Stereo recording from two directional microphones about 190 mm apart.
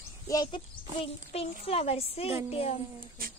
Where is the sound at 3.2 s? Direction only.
50° right (ahead or behind).